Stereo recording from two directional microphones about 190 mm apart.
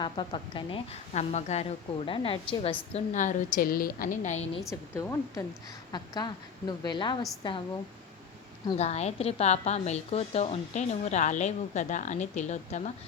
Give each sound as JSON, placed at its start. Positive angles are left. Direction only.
{"t": 0.0, "sound": "a woman's voice", "side_deg": 25}
{"t": 2.9, "sound": "a woman's voice", "side_deg": 40}
{"t": 4.9, "sound": "a woman's voice", "side_deg": 15}
{"t": 8.8, "sound": "a woman's voice", "side_deg": 35}